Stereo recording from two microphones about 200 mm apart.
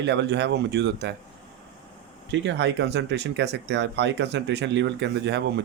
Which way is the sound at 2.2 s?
60° right (ahead or behind).